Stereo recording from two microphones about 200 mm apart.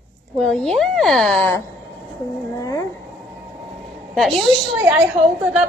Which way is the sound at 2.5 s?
15° left (ahead or behind).